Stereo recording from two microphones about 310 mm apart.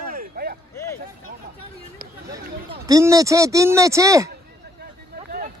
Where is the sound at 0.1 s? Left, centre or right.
Right.